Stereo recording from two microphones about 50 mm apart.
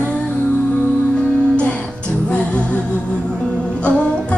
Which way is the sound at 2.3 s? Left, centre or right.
Left.